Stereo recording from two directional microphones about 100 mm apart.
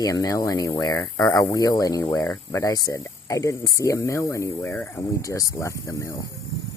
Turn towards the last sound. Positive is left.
turn(degrees=30)  # may be behind; listen again after turning